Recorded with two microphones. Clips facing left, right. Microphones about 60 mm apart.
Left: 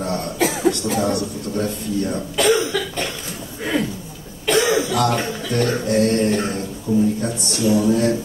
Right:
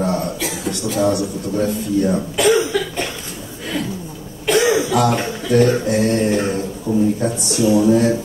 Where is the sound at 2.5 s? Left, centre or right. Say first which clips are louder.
Right 3 dB; centre.